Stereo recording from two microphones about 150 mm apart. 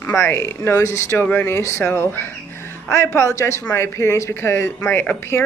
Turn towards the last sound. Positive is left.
turn(degrees=15)  # may be behind; listen again after turning